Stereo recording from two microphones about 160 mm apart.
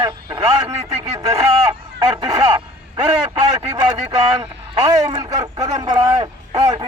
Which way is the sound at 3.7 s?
25° right (ahead or behind).